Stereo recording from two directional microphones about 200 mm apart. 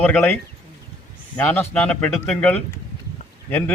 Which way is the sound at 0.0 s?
10° left (ahead or behind).